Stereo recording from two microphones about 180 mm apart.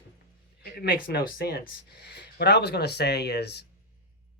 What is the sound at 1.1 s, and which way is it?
Speech, 55° left (ahead or behind).